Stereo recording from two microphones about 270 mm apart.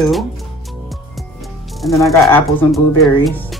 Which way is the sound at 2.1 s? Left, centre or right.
Centre.